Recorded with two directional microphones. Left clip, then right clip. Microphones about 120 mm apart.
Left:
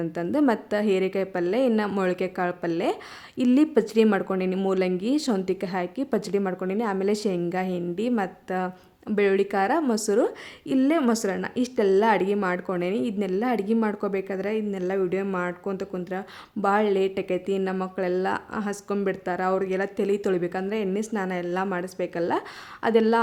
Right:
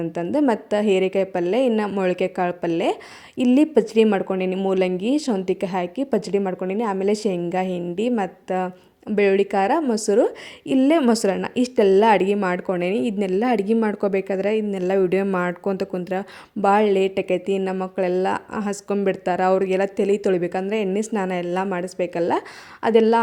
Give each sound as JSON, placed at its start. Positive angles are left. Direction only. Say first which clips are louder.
{"t": 0.0, "sound": "a woman's voice", "louder": "right 3 dB", "side_deg": -25}